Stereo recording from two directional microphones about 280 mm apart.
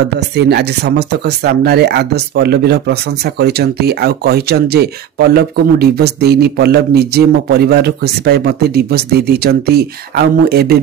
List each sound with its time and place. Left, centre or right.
0.4 s a man's voice: right